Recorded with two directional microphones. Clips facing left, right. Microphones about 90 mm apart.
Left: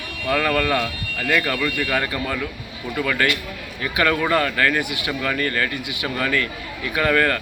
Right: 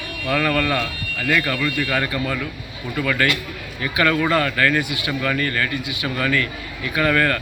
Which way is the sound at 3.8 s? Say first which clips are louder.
Right 1 dB; 25° left (ahead or behind).